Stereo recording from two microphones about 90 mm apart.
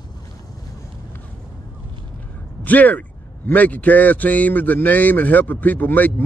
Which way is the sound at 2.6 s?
20° left (ahead or behind).